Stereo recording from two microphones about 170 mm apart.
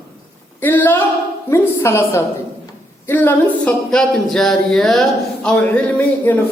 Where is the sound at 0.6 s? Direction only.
10° left (ahead or behind).